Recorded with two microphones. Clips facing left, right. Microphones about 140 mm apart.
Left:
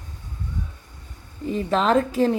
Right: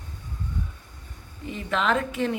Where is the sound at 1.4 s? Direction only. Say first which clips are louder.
Left 5 dB; 35° left (ahead or behind).